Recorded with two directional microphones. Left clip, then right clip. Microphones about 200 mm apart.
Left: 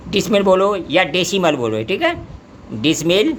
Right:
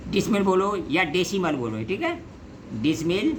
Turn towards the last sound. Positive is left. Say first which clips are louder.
# left 9 dB
turn(degrees=40)  # may be behind; listen again after turning